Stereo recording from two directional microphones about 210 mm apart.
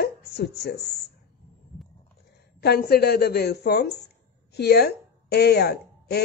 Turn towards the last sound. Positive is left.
turn(degrees=50)  # may be behind; listen again after turning